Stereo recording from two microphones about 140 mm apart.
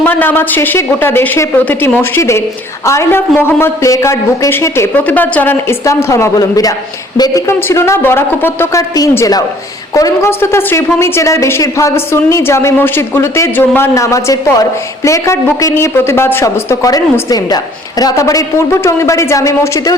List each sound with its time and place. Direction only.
0.0 s speech: 15° left (ahead or behind)